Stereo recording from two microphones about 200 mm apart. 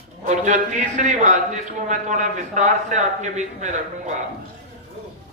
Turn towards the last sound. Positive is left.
turn(degrees=-35)  # may be behind; listen again after turning